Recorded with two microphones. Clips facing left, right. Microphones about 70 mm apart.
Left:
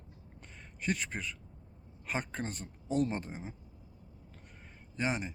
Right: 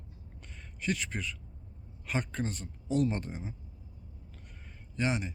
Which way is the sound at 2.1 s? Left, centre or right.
Left.